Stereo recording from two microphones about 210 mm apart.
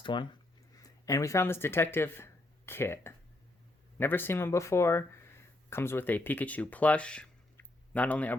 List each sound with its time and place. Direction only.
0.0 s speech: 20° left (ahead or behind)